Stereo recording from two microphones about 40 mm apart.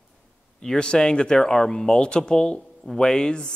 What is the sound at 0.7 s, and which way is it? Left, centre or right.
A man's voice, centre.